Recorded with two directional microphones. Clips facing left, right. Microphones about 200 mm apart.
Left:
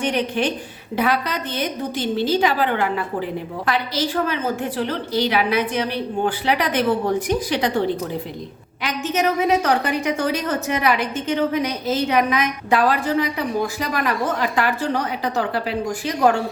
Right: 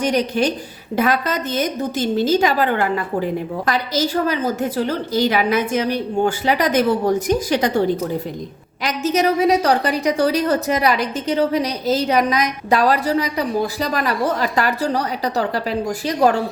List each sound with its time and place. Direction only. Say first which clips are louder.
0.0 s a woman's voice: right 3 dB; 40° right (ahead or behind)
8.8 s a woman's voice: right 3 dB; 40° right (ahead or behind)